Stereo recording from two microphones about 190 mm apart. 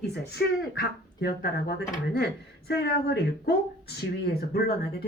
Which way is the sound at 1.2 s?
55° left (ahead or behind).